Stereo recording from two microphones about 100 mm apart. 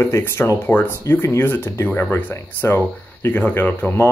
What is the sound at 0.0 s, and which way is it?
Speech, 25° left (ahead or behind).